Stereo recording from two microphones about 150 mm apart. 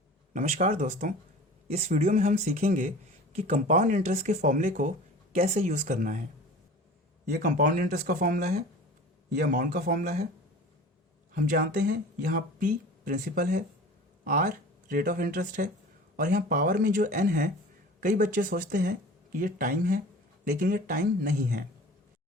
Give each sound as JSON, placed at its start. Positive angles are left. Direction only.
{"t": 0.3, "sound": "speech", "side_deg": -45}
{"t": 1.6, "sound": "speech", "side_deg": -45}
{"t": 2.2, "sound": "speech", "side_deg": -60}
{"t": 3.3, "sound": "speech", "side_deg": -45}
{"t": 3.6, "sound": "speech", "side_deg": -60}
{"t": 5.3, "sound": "speech", "side_deg": -45}
{"t": 7.3, "sound": "speech", "side_deg": -65}
{"t": 11.3, "sound": "speech", "side_deg": -70}